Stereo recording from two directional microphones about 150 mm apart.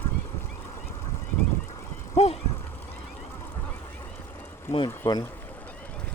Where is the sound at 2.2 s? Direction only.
45° left (ahead or behind).